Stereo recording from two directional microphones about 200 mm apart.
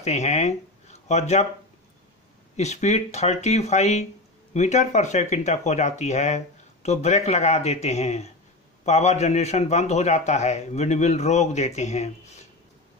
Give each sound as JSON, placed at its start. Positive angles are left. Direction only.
{"t": 0.0, "sound": "speech", "side_deg": 35}
{"t": 2.5, "sound": "speech", "side_deg": 35}